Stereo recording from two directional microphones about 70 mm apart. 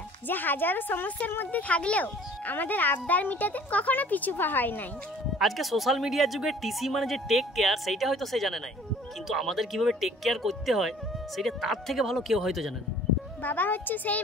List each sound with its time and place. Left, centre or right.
0.3 s speech: left
5.4 s speech: centre
13.4 s speech: left